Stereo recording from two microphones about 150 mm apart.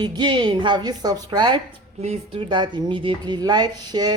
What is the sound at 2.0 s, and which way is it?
Speech, 40° right (ahead or behind).